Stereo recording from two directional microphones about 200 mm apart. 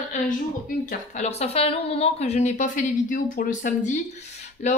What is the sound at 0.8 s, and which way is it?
A woman's voice, 35° left (ahead or behind).